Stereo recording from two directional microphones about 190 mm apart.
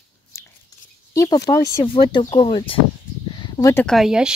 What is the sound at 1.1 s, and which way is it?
Speech, 15° left (ahead or behind).